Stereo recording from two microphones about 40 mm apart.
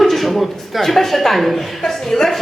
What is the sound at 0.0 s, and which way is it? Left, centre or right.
Speech, centre.